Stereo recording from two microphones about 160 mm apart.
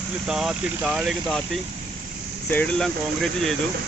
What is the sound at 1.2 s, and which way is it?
Speech, 5° left (ahead or behind).